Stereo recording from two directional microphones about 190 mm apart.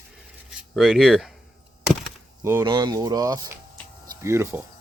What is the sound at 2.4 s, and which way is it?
Speech, 15° right (ahead or behind).